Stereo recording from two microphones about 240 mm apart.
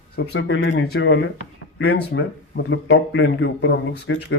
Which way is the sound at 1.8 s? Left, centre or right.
Left.